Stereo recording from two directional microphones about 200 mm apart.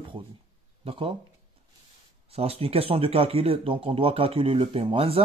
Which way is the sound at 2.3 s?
30° right (ahead or behind).